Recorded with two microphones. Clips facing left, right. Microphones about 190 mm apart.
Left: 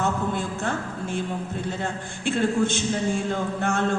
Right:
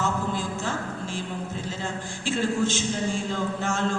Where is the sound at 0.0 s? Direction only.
60° left (ahead or behind).